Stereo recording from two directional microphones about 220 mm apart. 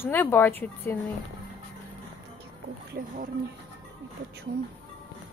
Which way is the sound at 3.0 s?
40° right (ahead or behind).